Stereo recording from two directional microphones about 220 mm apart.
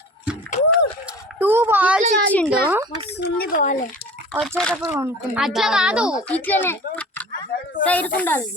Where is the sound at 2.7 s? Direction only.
10° right (ahead or behind).